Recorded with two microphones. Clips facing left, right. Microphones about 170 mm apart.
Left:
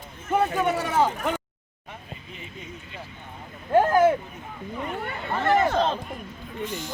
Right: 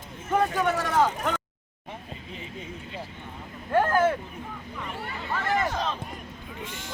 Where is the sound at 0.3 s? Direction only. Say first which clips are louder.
Left 1 dB; 10° left (ahead or behind).